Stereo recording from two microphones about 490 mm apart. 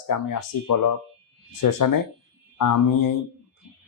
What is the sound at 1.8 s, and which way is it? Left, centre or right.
Speech, left.